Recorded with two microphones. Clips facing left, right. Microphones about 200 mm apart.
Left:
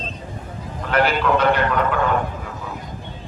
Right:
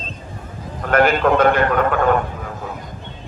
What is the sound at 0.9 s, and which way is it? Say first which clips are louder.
A man's voice: right 4 dB; 50° right (ahead or behind).